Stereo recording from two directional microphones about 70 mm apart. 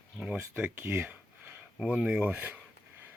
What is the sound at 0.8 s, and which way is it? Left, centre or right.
Speech, right.